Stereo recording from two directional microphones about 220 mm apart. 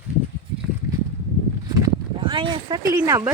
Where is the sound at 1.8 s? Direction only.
20° right (ahead or behind).